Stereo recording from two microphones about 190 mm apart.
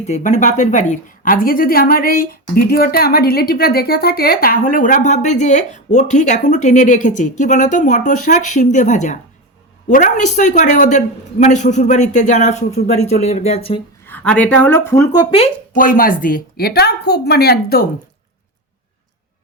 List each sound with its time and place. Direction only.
0.0 s a woman's voice: 35° left (ahead or behind)
14.1 s speech: 10° left (ahead or behind)
15.7 s a woman's voice: 45° left (ahead or behind)